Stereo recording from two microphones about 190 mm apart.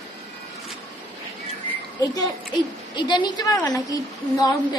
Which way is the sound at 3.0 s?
25° left (ahead or behind).